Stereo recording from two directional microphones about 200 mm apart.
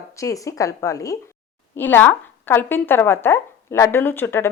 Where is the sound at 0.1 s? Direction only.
15° left (ahead or behind).